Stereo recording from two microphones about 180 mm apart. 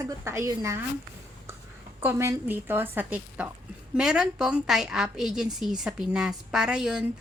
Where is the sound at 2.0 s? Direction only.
15° right (ahead or behind).